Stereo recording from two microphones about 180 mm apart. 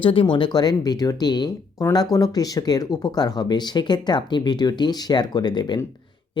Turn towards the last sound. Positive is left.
turn(degrees=25)  # may be behind; listen again after turning